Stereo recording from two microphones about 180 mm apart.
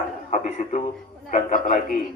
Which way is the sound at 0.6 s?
45° left (ahead or behind).